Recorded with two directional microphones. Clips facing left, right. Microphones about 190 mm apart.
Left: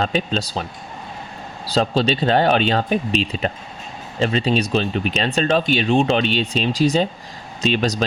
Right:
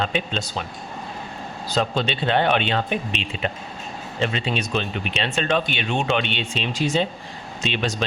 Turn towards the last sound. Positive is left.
turn(degrees=40)  # may be behind; listen again after turning